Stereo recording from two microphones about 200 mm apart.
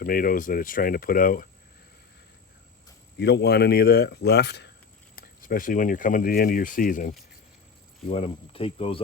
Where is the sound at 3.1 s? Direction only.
55° left (ahead or behind).